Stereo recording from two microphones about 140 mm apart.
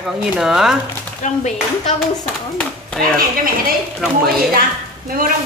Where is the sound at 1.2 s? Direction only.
65° left (ahead or behind).